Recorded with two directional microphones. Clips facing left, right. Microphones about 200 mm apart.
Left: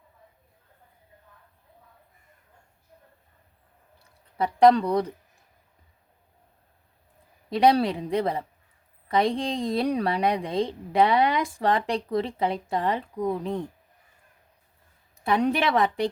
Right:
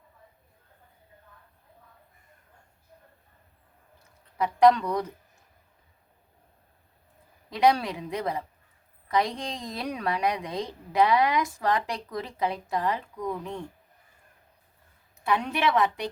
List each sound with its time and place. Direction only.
3.9 s a sound: 30° left (ahead or behind)
7.5 s a woman's voice: 30° left (ahead or behind)
15.2 s a woman's voice: 35° left (ahead or behind)